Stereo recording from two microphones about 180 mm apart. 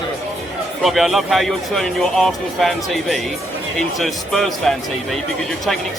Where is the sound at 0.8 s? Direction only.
Centre (ahead or behind).